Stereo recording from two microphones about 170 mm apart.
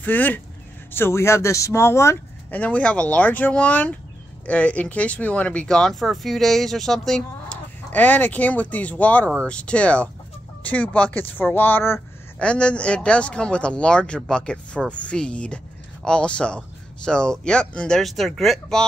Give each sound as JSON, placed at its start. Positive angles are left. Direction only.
{"t": 0.0, "sound": "speech", "side_deg": 10}